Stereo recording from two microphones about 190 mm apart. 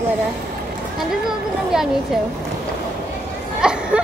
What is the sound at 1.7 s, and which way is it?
Speech, centre (ahead or behind).